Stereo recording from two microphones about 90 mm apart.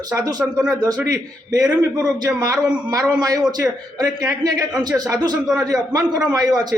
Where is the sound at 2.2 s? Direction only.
45° right (ahead or behind).